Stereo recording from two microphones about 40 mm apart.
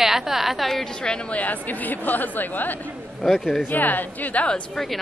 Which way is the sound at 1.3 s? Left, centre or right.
Left.